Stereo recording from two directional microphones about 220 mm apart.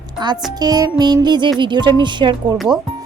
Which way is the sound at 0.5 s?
15° right (ahead or behind).